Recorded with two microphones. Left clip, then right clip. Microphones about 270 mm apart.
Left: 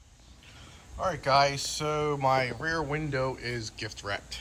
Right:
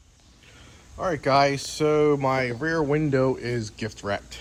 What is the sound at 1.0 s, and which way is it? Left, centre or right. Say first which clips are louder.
Speech: right 4 dB; centre.